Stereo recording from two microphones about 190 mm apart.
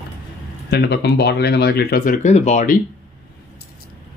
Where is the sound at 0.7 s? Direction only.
60° left (ahead or behind); by 2.8 s 40° left (ahead or behind).